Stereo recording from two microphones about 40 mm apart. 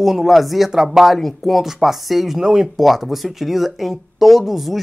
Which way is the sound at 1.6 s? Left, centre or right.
Centre.